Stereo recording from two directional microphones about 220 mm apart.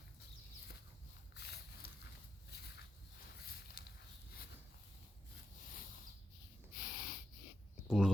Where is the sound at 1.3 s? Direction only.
45° left (ahead or behind).